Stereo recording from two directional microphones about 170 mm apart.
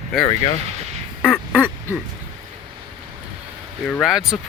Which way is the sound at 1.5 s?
10° right (ahead or behind).